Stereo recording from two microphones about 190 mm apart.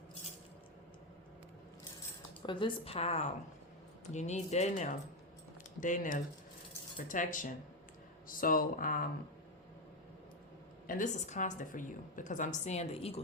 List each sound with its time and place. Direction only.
2.4 s a woman's voice: 25° left (ahead or behind); by 9.0 s 45° left (ahead or behind)
10.8 s a woman's voice: 45° left (ahead or behind)